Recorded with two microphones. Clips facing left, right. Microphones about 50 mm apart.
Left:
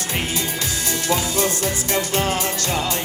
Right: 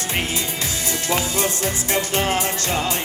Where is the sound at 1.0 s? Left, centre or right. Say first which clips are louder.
Left 1 dB; right.